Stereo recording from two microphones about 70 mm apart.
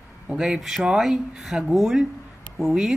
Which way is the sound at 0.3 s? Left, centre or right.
Centre.